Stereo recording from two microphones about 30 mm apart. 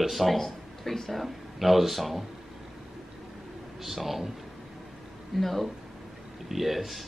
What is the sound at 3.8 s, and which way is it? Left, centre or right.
Speech, centre.